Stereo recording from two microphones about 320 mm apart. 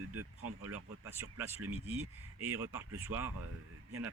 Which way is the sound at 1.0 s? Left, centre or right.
Centre.